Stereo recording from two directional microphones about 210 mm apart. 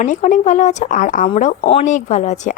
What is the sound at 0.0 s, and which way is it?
A woman's voice, 35° left (ahead or behind).